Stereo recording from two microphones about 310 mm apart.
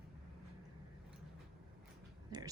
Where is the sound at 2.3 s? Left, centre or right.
Centre.